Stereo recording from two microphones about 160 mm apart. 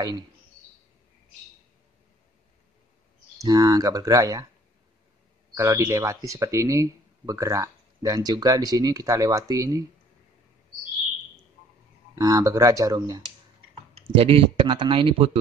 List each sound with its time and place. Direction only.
3.3 s speech: 25° right (ahead or behind)
5.5 s speech: 20° right (ahead or behind)
12.2 s speech: 25° right (ahead or behind)
13.9 s speech: 35° right (ahead or behind)